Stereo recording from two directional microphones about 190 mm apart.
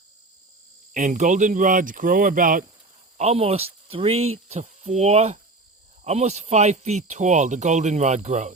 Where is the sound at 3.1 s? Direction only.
35° right (ahead or behind).